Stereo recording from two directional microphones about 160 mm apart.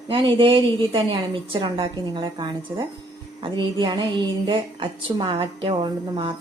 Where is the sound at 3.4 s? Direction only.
30° right (ahead or behind).